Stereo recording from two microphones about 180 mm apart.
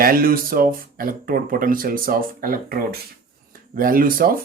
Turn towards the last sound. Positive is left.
turn(degrees=-50)  # may be behind; listen again after turning